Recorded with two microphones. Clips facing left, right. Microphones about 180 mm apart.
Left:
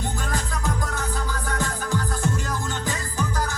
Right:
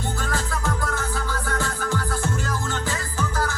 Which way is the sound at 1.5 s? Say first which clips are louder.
Even; 15° left (ahead or behind).